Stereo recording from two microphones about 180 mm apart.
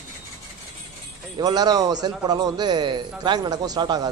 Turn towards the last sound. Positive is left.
turn(degrees=-25)  # may be behind; listen again after turning